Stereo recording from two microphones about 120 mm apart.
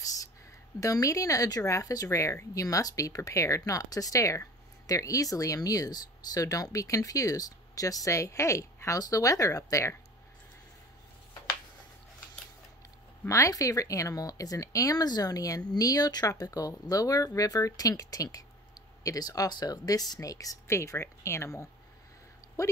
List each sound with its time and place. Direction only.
0.7 s speech: 30° left (ahead or behind)
13.3 s speech: 25° left (ahead or behind)